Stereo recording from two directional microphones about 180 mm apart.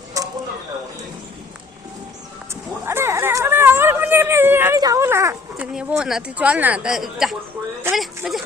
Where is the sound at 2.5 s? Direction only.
15° right (ahead or behind).